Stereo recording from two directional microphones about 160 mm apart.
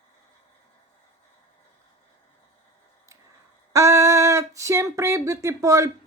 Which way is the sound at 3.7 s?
20° right (ahead or behind).